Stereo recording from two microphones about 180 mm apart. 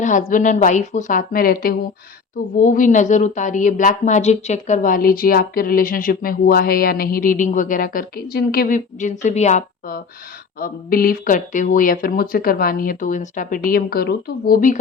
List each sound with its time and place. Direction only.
0.0 s a woman's voice: 45° left (ahead or behind)